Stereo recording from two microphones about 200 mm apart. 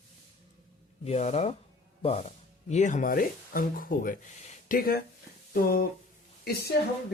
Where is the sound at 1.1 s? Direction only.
30° left (ahead or behind).